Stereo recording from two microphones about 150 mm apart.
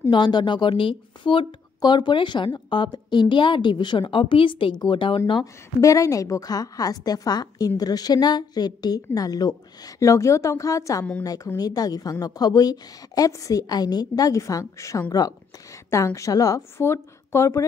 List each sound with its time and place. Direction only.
0.1 s speech: 30° left (ahead or behind)
5.2 s a woman's voice: 25° left (ahead or behind)